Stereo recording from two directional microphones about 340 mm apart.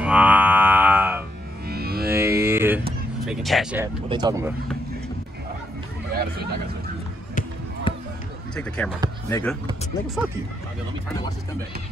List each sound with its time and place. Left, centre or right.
0.0 s a sound: centre
1.7 s music: right
2.0 s music: centre
2.4 s a sound: centre
3.3 s speech: centre
7.9 s run: centre
8.5 s speech: centre